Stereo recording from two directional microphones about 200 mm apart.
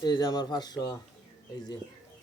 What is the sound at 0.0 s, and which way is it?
Speech, 20° left (ahead or behind).